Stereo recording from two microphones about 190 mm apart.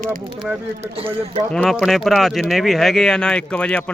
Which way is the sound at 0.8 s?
30° right (ahead or behind).